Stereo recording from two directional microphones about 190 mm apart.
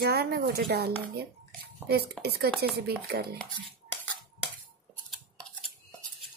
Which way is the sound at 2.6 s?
60° right (ahead or behind).